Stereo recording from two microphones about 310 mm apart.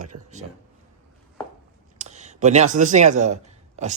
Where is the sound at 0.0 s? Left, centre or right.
Right.